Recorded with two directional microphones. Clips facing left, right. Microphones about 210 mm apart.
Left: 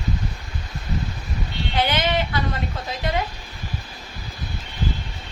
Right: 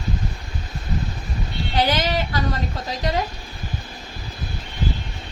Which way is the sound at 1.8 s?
40° right (ahead or behind).